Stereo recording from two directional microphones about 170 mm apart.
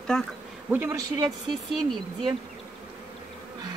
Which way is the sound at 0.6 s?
10° right (ahead or behind).